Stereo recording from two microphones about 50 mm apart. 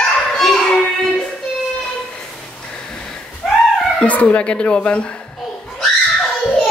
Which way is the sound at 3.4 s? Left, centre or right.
Centre.